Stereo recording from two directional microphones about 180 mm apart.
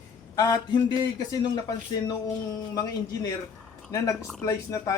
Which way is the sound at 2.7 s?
20° left (ahead or behind).